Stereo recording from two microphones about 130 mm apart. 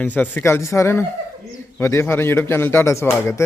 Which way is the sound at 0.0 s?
15° left (ahead or behind).